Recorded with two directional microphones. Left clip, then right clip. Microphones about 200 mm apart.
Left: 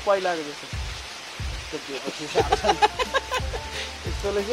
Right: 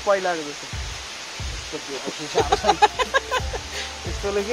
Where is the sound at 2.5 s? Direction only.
20° right (ahead or behind).